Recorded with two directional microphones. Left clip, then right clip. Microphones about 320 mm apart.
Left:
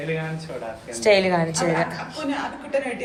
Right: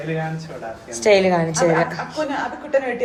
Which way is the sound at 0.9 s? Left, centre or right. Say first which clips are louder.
Right 3 dB; centre.